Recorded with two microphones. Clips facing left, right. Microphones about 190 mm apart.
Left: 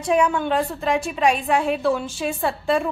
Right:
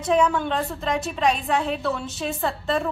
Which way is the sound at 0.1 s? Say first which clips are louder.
Left 1 dB; 10° left (ahead or behind).